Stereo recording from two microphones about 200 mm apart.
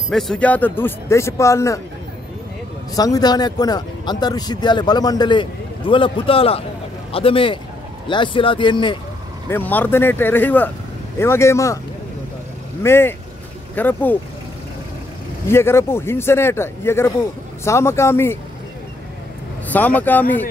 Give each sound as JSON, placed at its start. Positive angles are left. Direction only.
{"t": 0.1, "sound": "speech", "side_deg": 0}
{"t": 3.0, "sound": "speech", "side_deg": 20}
{"t": 9.5, "sound": "speech", "side_deg": 10}
{"t": 12.8, "sound": "speech", "side_deg": 10}
{"t": 15.4, "sound": "speech", "side_deg": 10}
{"t": 19.7, "sound": "speech", "side_deg": 10}